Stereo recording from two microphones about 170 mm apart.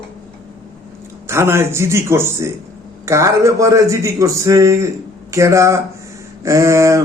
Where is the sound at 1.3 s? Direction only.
15° right (ahead or behind).